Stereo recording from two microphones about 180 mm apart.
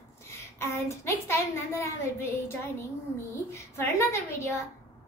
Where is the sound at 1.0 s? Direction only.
15° left (ahead or behind).